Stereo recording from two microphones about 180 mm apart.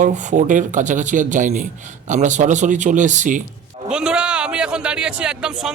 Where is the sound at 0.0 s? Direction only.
40° right (ahead or behind).